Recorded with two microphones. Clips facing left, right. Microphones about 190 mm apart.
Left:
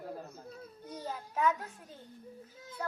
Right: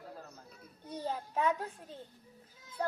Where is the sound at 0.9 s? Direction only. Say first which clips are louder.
Right 4 dB; 30° right (ahead or behind).